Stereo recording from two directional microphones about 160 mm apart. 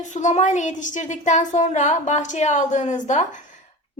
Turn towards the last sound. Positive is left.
turn(degrees=50)  # may be behind; listen again after turning